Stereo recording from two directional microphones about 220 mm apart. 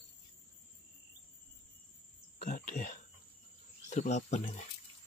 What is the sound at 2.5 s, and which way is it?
Cricket, 35° left (ahead or behind).